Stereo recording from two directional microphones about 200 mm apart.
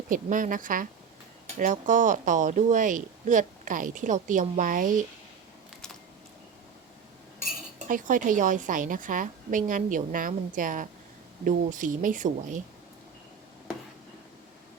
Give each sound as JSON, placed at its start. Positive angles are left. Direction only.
{"t": 0.1, "sound": "speech", "side_deg": -40}
{"t": 7.9, "sound": "speech", "side_deg": -40}